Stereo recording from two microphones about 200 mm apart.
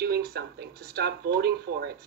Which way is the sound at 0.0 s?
55° right (ahead or behind).